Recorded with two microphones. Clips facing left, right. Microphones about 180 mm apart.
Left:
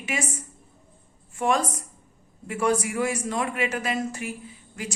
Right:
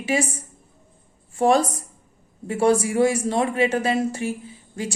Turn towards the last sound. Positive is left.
turn(degrees=-30)  # may be behind; listen again after turning